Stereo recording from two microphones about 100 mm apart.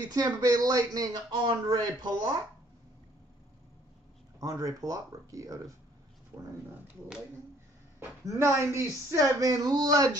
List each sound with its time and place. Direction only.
0.1 s speech: 40° right (ahead or behind)
4.4 s speech: 35° right (ahead or behind)
6.3 s speech: 20° right (ahead or behind)
8.0 s speech: 25° right (ahead or behind)